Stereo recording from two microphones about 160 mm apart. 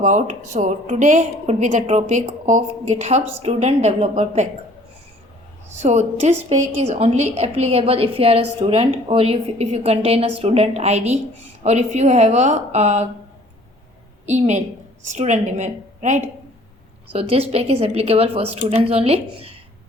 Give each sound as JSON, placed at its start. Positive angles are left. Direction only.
{"t": 0.0, "sound": "a woman's voice", "side_deg": -50}
{"t": 5.8, "sound": "a woman's voice", "side_deg": -45}
{"t": 14.3, "sound": "a woman's voice", "side_deg": -45}